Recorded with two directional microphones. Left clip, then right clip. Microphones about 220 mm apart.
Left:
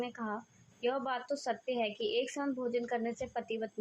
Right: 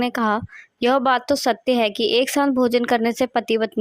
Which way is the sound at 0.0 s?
50° right (ahead or behind).